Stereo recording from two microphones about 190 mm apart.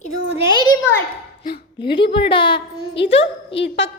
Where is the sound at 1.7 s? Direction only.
25° left (ahead or behind).